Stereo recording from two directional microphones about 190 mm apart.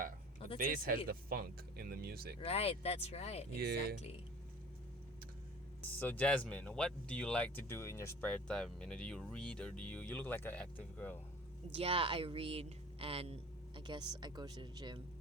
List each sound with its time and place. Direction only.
0.5 s speech: 45° right (ahead or behind)
2.4 s speech: 30° left (ahead or behind)
3.6 s speech: 55° right (ahead or behind)
6.0 s speech: 10° left (ahead or behind)
11.7 s a woman's voice: 30° right (ahead or behind)